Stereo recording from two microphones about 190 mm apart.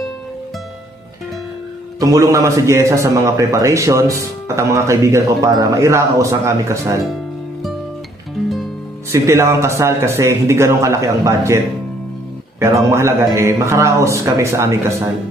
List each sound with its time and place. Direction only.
2.0 s a man's voice: 20° right (ahead or behind)
9.1 s a man's voice: 15° right (ahead or behind)